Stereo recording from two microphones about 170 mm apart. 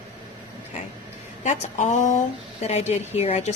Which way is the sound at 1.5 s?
45° left (ahead or behind).